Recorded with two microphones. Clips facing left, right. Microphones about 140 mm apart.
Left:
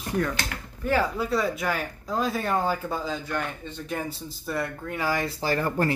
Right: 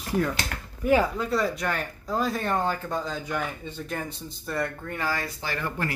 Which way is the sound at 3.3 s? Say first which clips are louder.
Even; 5° right (ahead or behind).